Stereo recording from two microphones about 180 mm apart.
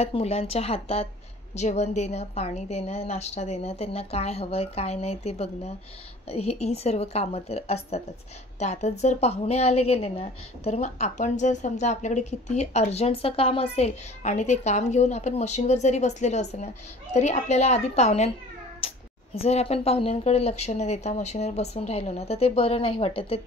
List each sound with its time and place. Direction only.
0.0 s a woman's voice: 35° left (ahead or behind)
19.3 s a woman's voice: 35° left (ahead or behind)